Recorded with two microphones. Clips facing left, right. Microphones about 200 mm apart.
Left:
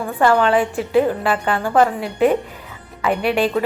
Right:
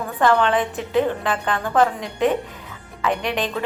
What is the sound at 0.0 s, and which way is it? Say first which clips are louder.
A woman's voice: left 2 dB; 10° left (ahead or behind).